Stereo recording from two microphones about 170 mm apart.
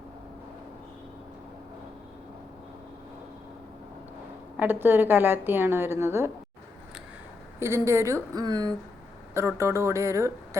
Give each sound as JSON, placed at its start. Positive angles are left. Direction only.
{"t": 4.5, "sound": "a woman's voice", "side_deg": -10}
{"t": 7.6, "sound": "a woman's voice", "side_deg": -15}